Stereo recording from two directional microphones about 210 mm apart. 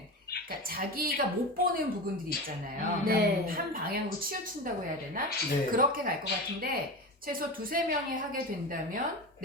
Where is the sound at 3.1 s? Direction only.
45° right (ahead or behind).